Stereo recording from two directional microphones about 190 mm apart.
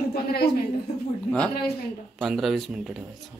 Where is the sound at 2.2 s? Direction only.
Centre (ahead or behind).